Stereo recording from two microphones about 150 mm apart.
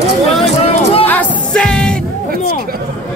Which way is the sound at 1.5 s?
5° left (ahead or behind).